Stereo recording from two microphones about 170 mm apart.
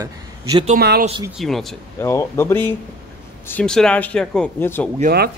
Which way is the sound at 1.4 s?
Centre (ahead or behind).